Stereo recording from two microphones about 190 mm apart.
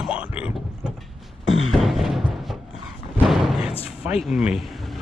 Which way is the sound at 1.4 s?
90° left.